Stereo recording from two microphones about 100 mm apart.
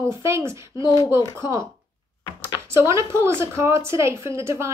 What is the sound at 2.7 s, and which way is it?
A woman's voice, 25° right (ahead or behind).